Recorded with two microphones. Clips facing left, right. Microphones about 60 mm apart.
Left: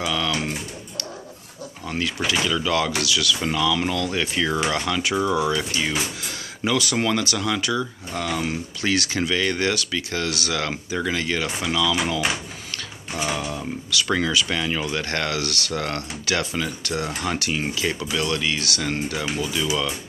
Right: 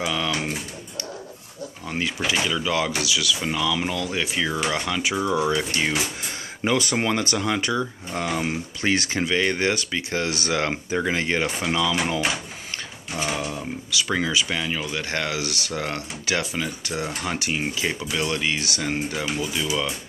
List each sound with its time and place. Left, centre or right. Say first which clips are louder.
0.0 s speech: left 1 dB; centre
1.9 s speech: left 1 dB; centre
13.4 s speech: left 1 dB; centre
14.6 s speech: left 2 dB; centre